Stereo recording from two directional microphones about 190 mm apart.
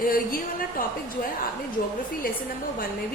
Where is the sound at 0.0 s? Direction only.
50° left (ahead or behind).